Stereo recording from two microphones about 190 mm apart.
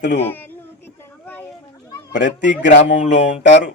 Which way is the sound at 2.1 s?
70° left (ahead or behind).